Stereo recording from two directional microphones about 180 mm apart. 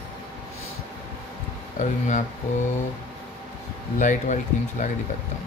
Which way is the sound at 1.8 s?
40° left (ahead or behind).